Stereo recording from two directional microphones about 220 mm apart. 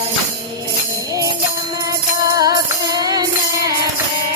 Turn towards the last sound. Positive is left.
turn(degrees=-20)  # may be behind; listen again after turning